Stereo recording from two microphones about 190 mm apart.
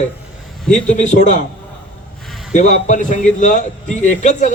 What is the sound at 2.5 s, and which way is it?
A man's voice, 40° left (ahead or behind).